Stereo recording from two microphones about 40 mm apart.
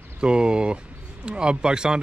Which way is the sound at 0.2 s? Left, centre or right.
Right.